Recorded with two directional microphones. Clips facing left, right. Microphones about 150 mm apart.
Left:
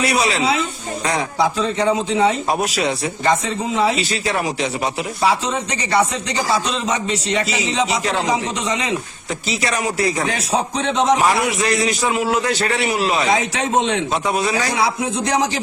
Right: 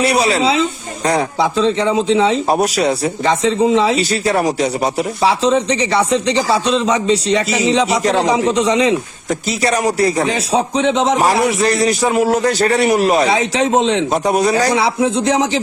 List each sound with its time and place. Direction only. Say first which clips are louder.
0.0 s speech: right 4 dB; 30° right (ahead or behind)